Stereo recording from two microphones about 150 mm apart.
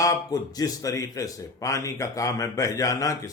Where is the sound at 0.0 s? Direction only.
25° left (ahead or behind).